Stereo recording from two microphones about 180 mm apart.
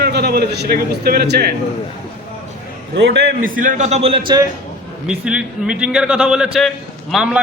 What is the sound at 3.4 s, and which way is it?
A man's voice, 50° right (ahead or behind).